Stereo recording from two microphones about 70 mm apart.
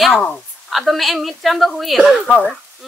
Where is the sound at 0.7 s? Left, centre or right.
Centre.